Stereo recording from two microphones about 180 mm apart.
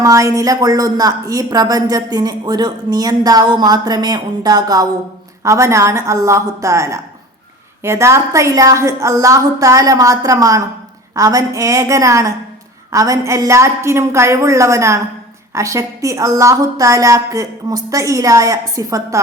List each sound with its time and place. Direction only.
0.0 s a woman's voice: 15° right (ahead or behind)